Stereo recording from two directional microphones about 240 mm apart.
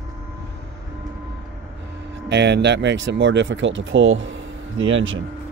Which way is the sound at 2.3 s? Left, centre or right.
Right.